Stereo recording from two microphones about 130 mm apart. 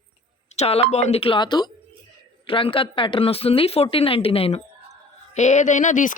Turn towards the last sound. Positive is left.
turn(degrees=75)  # may be behind; listen again after turning